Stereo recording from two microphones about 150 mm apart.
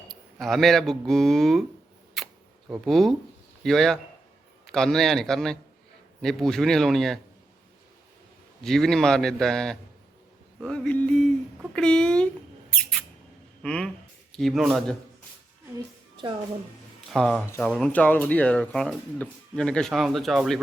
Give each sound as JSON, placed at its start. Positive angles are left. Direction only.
{"t": 0.1, "sound": "speech", "side_deg": 0}
{"t": 2.2, "sound": "camera", "side_deg": 0}
{"t": 2.8, "sound": "speech", "side_deg": 0}
{"t": 8.6, "sound": "speech", "side_deg": 0}
{"t": 12.7, "sound": "mouse", "side_deg": 5}
{"t": 13.6, "sound": "speech", "side_deg": 5}
{"t": 17.1, "sound": "speech", "side_deg": 5}
{"t": 17.4, "sound": "speech", "side_deg": 20}
{"t": 17.7, "sound": "speech", "side_deg": 5}